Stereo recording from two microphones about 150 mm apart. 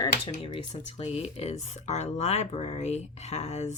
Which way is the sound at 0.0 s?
35° left (ahead or behind).